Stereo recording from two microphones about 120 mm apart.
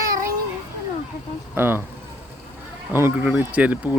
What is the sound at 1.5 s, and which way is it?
Speech, 20° right (ahead or behind).